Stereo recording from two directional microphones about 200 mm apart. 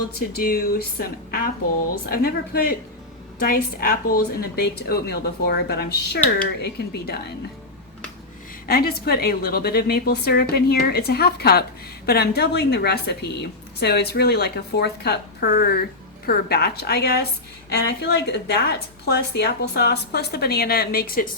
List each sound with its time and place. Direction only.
0.2 s a woman's voice: 50° left (ahead or behind)
8.6 s a woman's voice: 50° left (ahead or behind)